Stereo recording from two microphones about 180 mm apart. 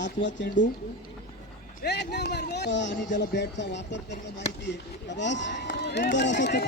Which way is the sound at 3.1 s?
80° left.